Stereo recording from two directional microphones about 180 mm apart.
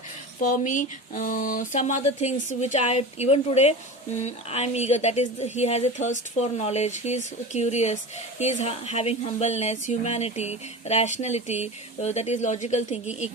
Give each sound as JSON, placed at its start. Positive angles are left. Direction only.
{"t": 0.3, "sound": "speech", "side_deg": 45}